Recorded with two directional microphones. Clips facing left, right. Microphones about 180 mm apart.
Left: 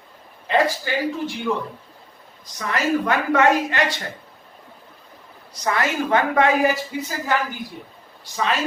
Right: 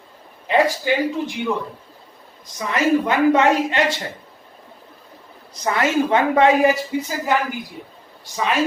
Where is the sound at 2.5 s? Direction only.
20° right (ahead or behind).